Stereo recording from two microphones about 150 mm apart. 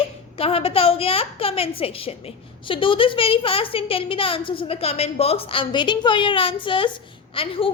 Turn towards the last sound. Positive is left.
turn(degrees=35)  # may be behind; listen again after turning